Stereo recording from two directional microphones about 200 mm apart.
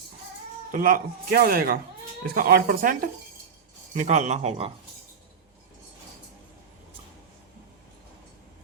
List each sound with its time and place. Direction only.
0.7 s speech: 45° right (ahead or behind)